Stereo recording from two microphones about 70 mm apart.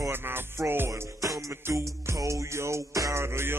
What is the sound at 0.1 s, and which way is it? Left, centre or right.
Music, right.